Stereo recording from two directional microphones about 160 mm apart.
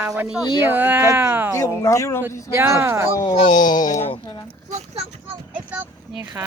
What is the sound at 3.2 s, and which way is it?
Speech, 30° left (ahead or behind).